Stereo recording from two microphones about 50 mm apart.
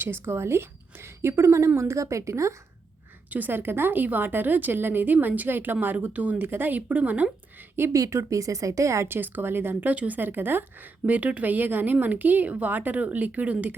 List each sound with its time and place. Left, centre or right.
0.0 s a woman's voice: right
3.2 s a woman's voice: right
6.4 s a woman's voice: right
7.8 s speech: right
9.0 s speech: right
9.9 s speech: right
10.2 s a woman's voice: right